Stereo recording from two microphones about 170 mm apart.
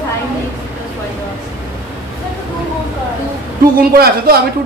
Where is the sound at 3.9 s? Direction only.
65° right (ahead or behind).